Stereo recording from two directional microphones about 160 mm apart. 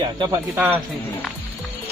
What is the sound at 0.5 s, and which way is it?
Speech, 10° right (ahead or behind).